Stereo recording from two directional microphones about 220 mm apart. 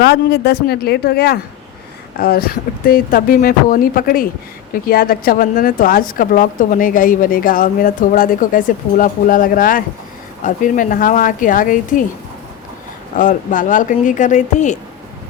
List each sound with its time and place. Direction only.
0.0 s a woman's voice: 50° left (ahead or behind)
13.1 s a woman's voice: 35° left (ahead or behind)